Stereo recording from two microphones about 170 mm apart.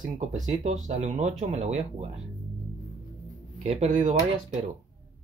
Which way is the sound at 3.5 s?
40° right (ahead or behind).